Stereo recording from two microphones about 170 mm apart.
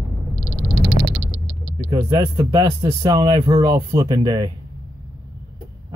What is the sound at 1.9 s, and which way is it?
Speech, 20° right (ahead or behind).